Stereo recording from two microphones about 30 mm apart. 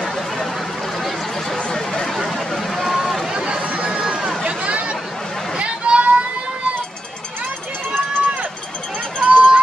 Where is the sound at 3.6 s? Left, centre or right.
Right.